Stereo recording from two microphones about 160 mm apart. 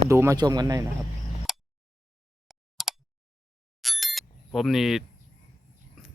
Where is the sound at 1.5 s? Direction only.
Centre (ahead or behind).